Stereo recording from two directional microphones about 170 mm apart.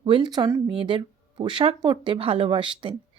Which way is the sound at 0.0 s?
30° right (ahead or behind).